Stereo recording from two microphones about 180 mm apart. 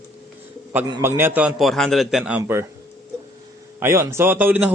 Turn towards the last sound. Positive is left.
turn(degrees=-10)  # may be behind; listen again after turning